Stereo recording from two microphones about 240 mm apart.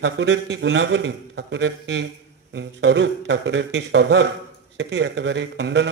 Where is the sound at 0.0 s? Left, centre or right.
Right.